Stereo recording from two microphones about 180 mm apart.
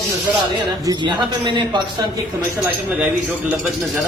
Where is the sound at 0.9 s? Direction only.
25° right (ahead or behind).